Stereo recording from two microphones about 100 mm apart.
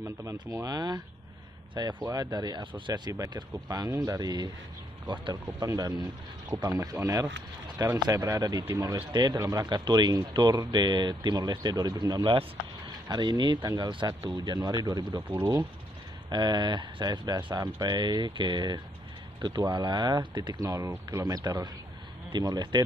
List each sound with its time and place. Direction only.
0.0 s speech: 30° right (ahead or behind)
9.0 s speech: 45° right (ahead or behind)
15.2 s speech: 20° right (ahead or behind)
16.3 s speech: 45° right (ahead or behind)
20.6 s speech: 30° right (ahead or behind)